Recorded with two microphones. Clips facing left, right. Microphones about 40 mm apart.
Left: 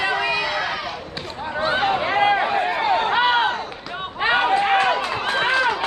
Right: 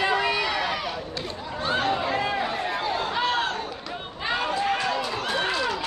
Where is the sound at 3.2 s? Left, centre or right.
Left.